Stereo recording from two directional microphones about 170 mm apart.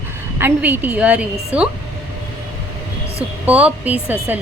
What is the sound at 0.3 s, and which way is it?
A woman's voice, 10° right (ahead or behind).